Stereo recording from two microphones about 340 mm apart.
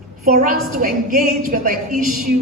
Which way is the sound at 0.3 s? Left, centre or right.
Right.